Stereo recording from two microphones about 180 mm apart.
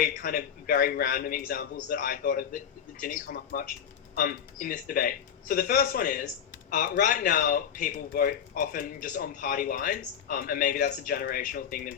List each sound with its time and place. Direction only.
0.0 s a man's voice: 55° left (ahead or behind)